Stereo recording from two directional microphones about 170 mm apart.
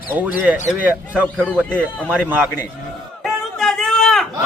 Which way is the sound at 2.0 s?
10° right (ahead or behind).